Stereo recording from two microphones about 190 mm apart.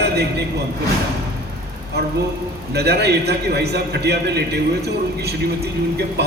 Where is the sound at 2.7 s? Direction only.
60° right (ahead or behind).